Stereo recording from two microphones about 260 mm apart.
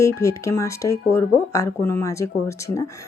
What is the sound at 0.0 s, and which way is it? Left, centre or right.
Speech, centre.